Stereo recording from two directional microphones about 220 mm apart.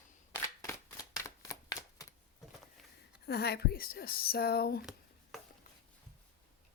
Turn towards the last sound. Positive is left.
turn(degrees=45)  # may be behind; listen again after turning